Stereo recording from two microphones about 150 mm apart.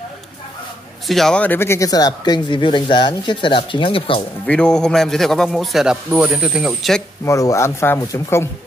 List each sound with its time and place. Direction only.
1.0 s speech: centre (ahead or behind); by 4.2 s 35° left (ahead or behind)
4.5 s a man's voice: 5° left (ahead or behind)
7.2 s speech: 20° left (ahead or behind)